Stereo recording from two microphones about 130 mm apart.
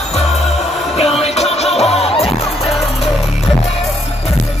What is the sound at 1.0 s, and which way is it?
Music, 50° left (ahead or behind).